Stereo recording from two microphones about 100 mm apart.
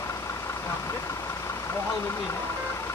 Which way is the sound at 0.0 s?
30° left (ahead or behind).